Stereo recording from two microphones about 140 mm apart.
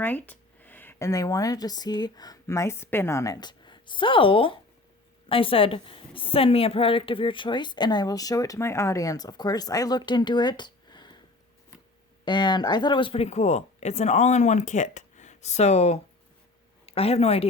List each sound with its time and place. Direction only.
0.0 s a woman's voice: 15° left (ahead or behind); by 11.2 s 30° left (ahead or behind)
12.2 s speech: 35° left (ahead or behind)